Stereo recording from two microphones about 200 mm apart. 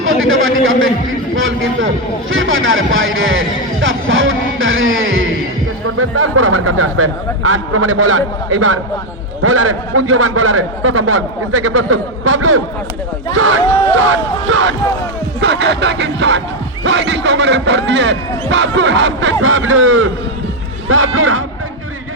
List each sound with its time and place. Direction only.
0.0 s a man's voice: 85° right
13.7 s speech: 15° left (ahead or behind)
13.9 s speech: 90° right; by 14.8 s 70° right (ahead or behind)
15.4 s a man's voice: 60° right (ahead or behind); by 21.4 s 90° right